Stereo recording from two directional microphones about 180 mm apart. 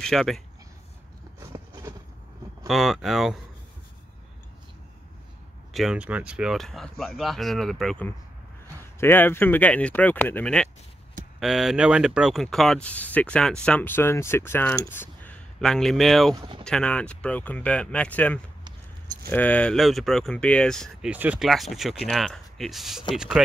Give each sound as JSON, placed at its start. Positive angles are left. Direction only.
{"t": 0.0, "sound": "speech", "side_deg": 0}
{"t": 1.5, "sound": "a sound", "side_deg": -20}
{"t": 2.7, "sound": "speech", "side_deg": 0}
{"t": 5.7, "sound": "speech", "side_deg": 0}
{"t": 14.9, "sound": "mechanisms", "side_deg": 10}
{"t": 16.3, "sound": "speech", "side_deg": -25}
{"t": 16.6, "sound": "speech", "side_deg": 5}
{"t": 21.1, "sound": "speech", "side_deg": -5}